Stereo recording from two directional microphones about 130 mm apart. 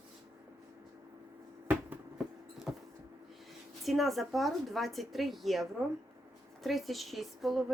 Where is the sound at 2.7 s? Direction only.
5° right (ahead or behind).